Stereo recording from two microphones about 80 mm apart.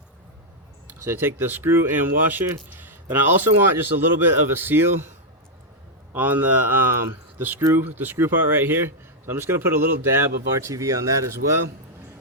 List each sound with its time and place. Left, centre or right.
0.9 s a man's voice: right
6.1 s a man's voice: right